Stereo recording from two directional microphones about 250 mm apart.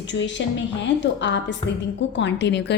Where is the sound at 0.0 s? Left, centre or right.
Left.